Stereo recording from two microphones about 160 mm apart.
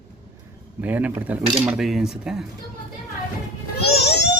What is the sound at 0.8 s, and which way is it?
Speech, 10° right (ahead or behind).